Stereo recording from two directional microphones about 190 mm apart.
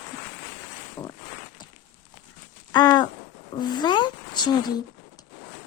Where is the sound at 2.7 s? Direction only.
20° left (ahead or behind).